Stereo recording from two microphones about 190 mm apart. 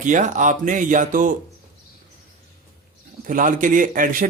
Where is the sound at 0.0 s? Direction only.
40° right (ahead or behind).